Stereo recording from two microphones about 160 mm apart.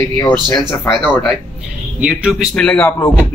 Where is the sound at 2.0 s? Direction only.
5° right (ahead or behind).